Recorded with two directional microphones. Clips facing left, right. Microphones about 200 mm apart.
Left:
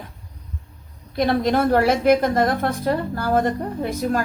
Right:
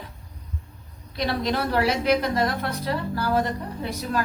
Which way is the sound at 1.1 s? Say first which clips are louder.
Left 6 dB; 50° left (ahead or behind).